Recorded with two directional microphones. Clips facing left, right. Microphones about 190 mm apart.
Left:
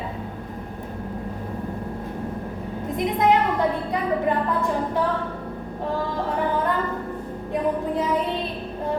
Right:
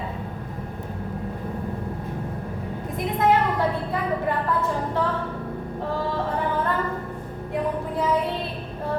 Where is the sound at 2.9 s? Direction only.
20° left (ahead or behind).